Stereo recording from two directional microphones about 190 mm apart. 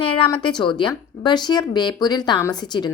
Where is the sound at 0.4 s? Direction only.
25° left (ahead or behind).